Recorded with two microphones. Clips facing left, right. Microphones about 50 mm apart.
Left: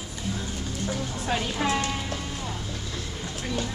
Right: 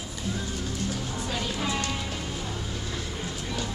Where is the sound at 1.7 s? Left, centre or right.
Centre.